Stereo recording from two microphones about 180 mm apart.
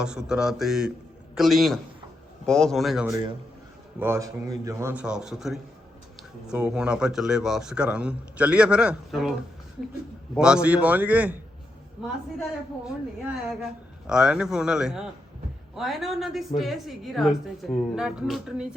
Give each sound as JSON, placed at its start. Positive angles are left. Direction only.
{"t": 0.0, "sound": "a man's voice", "side_deg": -5}
{"t": 3.1, "sound": "a man's voice", "side_deg": -20}
{"t": 10.3, "sound": "a man's voice", "side_deg": -5}
{"t": 12.8, "sound": "a man's voice", "side_deg": 0}